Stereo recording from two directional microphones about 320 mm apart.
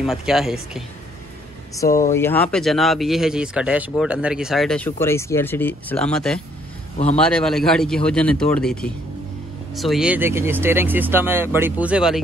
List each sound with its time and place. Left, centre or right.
0.0 s speech: centre
1.9 s speech: left
2.1 s speech: centre
9.8 s speech: centre